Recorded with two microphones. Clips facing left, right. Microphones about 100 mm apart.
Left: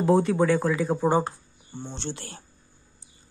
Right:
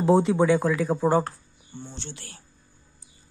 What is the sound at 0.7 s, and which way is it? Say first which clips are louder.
Speech: right 1 dB; centre (ahead or behind).